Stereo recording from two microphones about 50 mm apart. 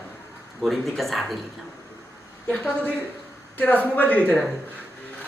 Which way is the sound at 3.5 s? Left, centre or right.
Left.